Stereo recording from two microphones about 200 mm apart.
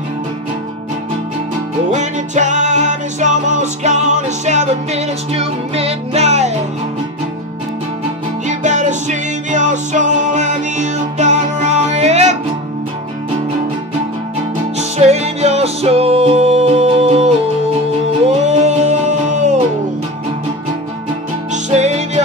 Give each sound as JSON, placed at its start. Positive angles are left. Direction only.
{"t": 1.9, "sound": "music", "side_deg": -35}
{"t": 8.5, "sound": "music", "side_deg": -35}
{"t": 14.8, "sound": "music", "side_deg": -35}
{"t": 21.6, "sound": "music", "side_deg": -35}